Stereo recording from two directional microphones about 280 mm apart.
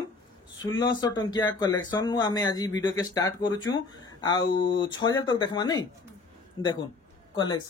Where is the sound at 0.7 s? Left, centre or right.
Centre.